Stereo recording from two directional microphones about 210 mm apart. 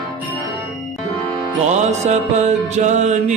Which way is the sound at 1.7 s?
35° right (ahead or behind).